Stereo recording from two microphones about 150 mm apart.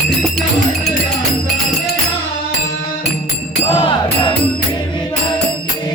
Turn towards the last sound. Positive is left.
turn(degrees=35)  # may be behind; listen again after turning